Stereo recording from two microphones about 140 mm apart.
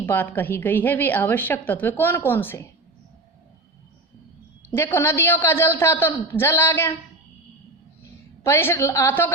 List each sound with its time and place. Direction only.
0.0 s a woman's voice: 15° left (ahead or behind)
4.7 s a woman's voice: 15° left (ahead or behind)
8.4 s a woman's voice: 15° left (ahead or behind)